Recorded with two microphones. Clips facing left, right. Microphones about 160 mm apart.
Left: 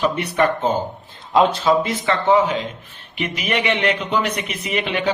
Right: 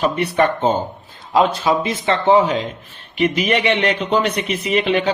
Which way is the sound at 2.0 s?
30° right (ahead or behind).